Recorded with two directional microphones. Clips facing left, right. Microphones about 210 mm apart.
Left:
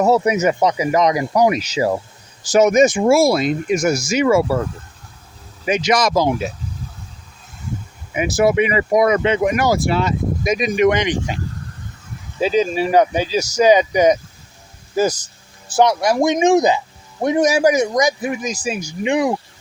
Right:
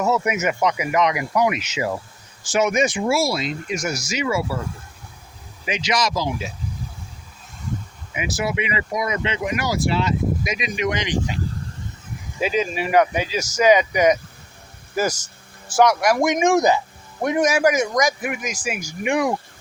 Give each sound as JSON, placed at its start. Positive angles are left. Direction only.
{"t": 0.0, "sound": "speech", "side_deg": 35}
{"t": 5.6, "sound": "speech", "side_deg": 50}
{"t": 8.1, "sound": "speech", "side_deg": 45}
{"t": 12.4, "sound": "speech", "side_deg": 30}
{"t": 15.7, "sound": "speech", "side_deg": 25}
{"t": 17.2, "sound": "speech", "side_deg": 30}
{"t": 19.0, "sound": "speech", "side_deg": 20}